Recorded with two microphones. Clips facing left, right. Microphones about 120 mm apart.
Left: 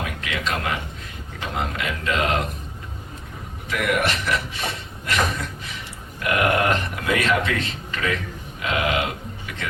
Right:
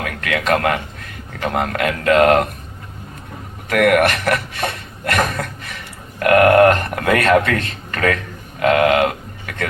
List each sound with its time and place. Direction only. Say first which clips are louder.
0.0 s a man's voice: right 6 dB; 60° right (ahead or behind)
3.7 s speech: right 9 dB; 60° right (ahead or behind)